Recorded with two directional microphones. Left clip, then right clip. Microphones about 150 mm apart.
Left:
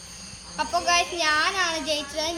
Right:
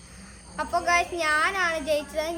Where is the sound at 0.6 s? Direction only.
20° right (ahead or behind).